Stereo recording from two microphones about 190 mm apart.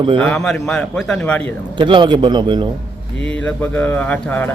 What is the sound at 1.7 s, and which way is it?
Speech, 25° right (ahead or behind).